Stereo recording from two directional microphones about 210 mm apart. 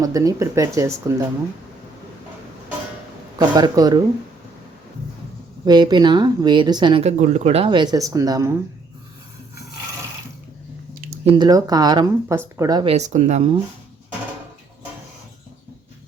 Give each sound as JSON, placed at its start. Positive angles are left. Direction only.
{"t": 0.0, "sound": "speech", "side_deg": -15}
{"t": 3.3, "sound": "speech", "side_deg": -20}
{"t": 5.6, "sound": "speech", "side_deg": -20}
{"t": 11.3, "sound": "speech", "side_deg": -20}